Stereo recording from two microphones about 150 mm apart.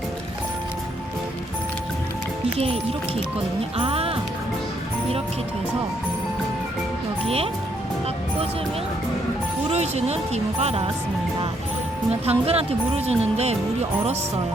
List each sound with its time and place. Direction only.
3.8 s speech: 40° right (ahead or behind)
9.6 s speech: 45° right (ahead or behind)
12.2 s speech: 40° right (ahead or behind)